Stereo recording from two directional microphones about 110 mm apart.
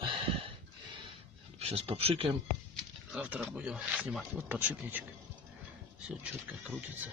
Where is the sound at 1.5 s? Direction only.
65° right (ahead or behind).